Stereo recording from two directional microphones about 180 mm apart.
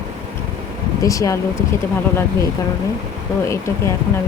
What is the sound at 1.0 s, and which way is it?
Speech, 20° left (ahead or behind).